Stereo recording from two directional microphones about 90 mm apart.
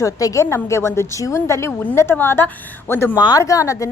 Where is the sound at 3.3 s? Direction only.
40° left (ahead or behind).